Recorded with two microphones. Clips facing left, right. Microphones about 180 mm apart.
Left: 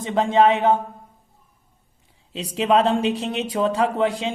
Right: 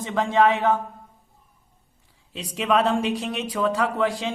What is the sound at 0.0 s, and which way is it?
Speech, 20° left (ahead or behind).